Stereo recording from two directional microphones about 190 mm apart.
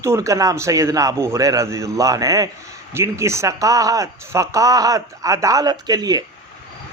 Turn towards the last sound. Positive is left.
turn(degrees=-20)  # may be behind; listen again after turning